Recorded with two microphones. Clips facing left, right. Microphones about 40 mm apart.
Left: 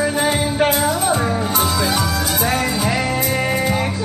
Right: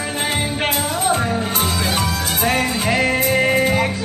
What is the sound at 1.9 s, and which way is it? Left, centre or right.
Music, right.